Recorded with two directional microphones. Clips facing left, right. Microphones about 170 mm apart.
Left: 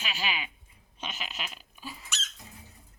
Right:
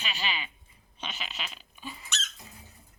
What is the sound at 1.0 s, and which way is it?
Squeak, 5° left (ahead or behind).